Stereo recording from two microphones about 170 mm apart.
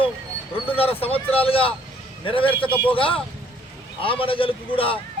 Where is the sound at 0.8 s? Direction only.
35° left (ahead or behind).